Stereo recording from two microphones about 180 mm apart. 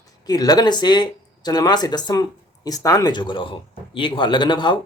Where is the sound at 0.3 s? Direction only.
20° left (ahead or behind).